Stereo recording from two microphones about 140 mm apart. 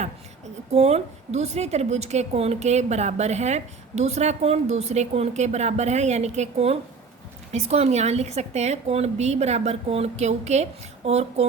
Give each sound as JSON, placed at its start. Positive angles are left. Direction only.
{"t": 0.7, "sound": "a woman's voice", "side_deg": -50}